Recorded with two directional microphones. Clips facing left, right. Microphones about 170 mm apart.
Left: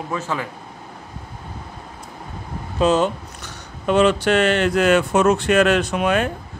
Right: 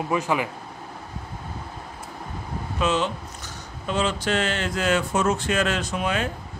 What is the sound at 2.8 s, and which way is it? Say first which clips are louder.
Speech: left 7 dB; 40° left (ahead or behind).